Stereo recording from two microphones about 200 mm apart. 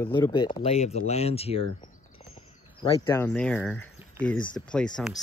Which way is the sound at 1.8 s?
25° left (ahead or behind).